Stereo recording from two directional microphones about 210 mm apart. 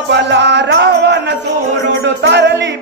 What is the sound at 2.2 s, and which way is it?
Music, 55° right (ahead or behind).